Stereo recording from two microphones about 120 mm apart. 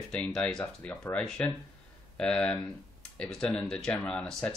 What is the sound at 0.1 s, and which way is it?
Speech, 10° left (ahead or behind).